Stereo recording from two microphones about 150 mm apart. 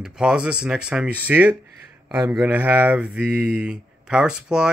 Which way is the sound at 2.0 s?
15° right (ahead or behind).